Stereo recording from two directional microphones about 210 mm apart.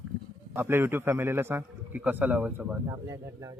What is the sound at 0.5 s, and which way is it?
A man's voice, 10° right (ahead or behind).